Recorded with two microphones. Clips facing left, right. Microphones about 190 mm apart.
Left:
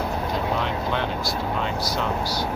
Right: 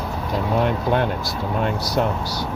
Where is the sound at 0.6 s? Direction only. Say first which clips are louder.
Right 6 dB; 50° right (ahead or behind).